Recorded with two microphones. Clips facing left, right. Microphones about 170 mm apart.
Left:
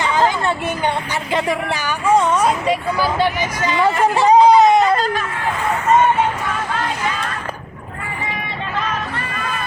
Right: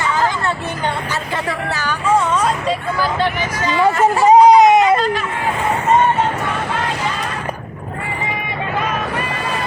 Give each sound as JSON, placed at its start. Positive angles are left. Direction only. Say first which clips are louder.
{"t": 0.0, "sound": "a sound", "louder": "left 1 dB", "side_deg": 20}
{"t": 1.3, "sound": "speech", "louder": "left 6 dB", "side_deg": 15}
{"t": 4.3, "sound": "baby cry", "louder": "right 2 dB", "side_deg": -20}